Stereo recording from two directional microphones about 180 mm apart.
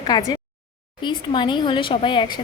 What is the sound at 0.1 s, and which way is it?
Speech, 20° left (ahead or behind).